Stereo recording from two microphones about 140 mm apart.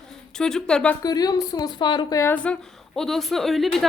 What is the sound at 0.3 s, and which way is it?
Speech, 5° left (ahead or behind).